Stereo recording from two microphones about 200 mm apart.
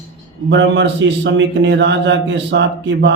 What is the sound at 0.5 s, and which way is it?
A man's voice, 60° right (ahead or behind).